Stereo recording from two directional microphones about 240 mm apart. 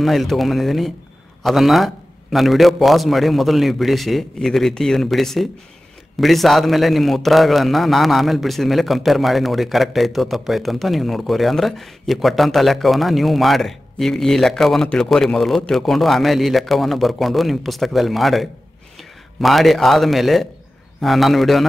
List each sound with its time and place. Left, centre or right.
0.0 s a man's voice: centre